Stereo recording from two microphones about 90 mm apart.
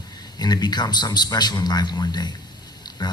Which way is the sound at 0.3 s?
50° left (ahead or behind).